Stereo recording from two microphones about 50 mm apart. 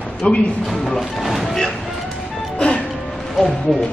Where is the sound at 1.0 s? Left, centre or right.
Centre.